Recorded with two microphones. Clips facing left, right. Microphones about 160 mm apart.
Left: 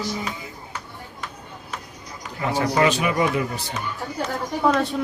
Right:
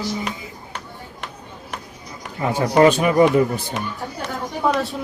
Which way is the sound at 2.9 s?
40° right (ahead or behind).